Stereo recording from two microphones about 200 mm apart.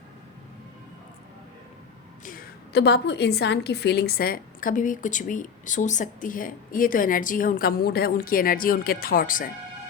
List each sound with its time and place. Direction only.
2.2 s a woman's voice: 45° left (ahead or behind)